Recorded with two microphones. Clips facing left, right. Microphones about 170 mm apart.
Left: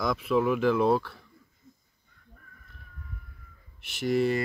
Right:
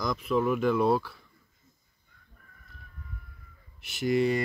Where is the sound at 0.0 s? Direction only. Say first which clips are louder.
Left 2 dB; 5° left (ahead or behind).